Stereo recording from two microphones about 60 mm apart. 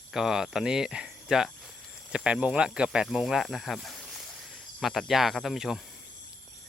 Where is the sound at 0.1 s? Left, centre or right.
Centre.